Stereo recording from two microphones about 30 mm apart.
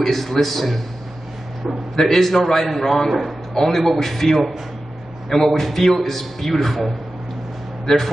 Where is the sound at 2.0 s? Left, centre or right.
Centre.